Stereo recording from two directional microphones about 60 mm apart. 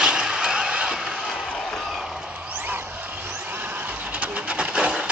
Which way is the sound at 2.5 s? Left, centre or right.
Right.